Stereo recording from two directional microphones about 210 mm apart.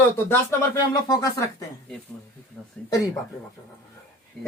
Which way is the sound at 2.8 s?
5° left (ahead or behind).